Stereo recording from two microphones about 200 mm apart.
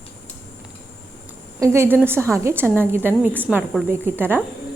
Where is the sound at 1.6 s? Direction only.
15° right (ahead or behind).